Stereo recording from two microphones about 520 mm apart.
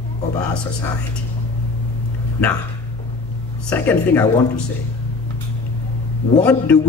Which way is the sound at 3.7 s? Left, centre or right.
Centre.